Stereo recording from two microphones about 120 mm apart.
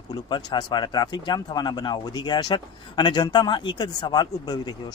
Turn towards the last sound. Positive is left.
turn(degrees=35)  # may be behind; listen again after turning